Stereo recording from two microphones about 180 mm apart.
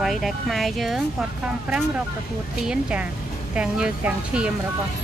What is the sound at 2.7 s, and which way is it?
A woman's voice, 5° right (ahead or behind).